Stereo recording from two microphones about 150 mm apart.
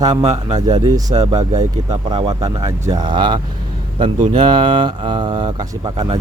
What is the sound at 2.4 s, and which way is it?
Speech, 25° right (ahead or behind).